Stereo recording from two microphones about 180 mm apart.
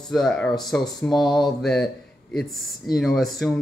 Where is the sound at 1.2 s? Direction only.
25° left (ahead or behind).